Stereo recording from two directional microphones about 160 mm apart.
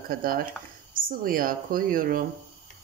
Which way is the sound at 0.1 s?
65° right (ahead or behind).